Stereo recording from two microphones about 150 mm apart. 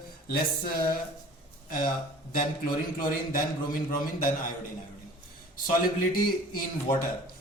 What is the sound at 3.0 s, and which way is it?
A man's voice, 70° left (ahead or behind).